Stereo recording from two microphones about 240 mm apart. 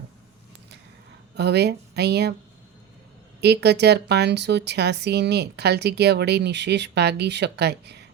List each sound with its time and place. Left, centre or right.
1.4 s speech: right
3.4 s speech: right